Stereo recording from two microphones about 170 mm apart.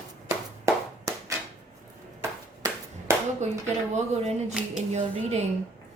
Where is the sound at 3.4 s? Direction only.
45° right (ahead or behind).